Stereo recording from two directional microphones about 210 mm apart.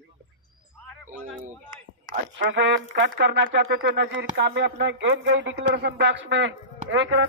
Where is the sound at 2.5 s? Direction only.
55° right (ahead or behind).